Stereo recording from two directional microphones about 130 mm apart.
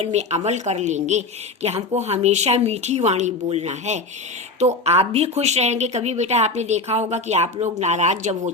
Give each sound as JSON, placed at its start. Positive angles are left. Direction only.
{"t": 0.0, "sound": "speech", "side_deg": -60}